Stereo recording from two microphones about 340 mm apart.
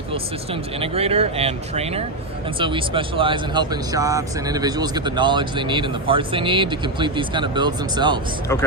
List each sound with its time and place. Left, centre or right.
0.8 s speech: centre